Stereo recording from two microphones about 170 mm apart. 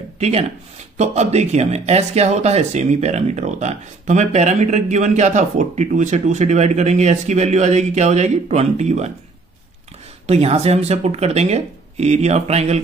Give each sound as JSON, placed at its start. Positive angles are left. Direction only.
{"t": 0.2, "sound": "speech", "side_deg": -35}
{"t": 10.2, "sound": "speech", "side_deg": -40}